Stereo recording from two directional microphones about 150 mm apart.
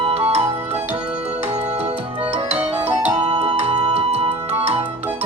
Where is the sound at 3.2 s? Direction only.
45° right (ahead or behind).